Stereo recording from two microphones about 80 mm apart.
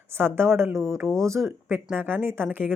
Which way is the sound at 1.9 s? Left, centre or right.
Right.